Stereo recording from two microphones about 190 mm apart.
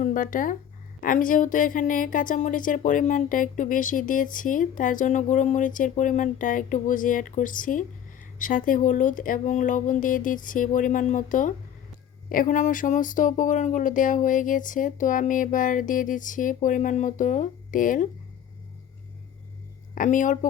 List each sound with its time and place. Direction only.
0.0 s a woman's voice: 45° left (ahead or behind)
20.0 s a woman's voice: 45° left (ahead or behind)